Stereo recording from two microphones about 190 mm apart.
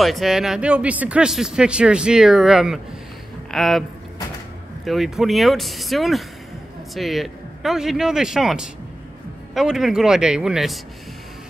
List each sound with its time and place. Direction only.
0.0 s speech: centre (ahead or behind)
4.8 s speech: centre (ahead or behind)